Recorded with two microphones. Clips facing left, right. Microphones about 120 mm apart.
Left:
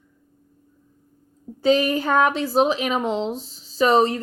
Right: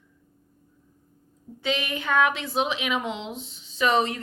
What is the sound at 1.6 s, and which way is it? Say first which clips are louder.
Speech: left 10 dB; 40° left (ahead or behind).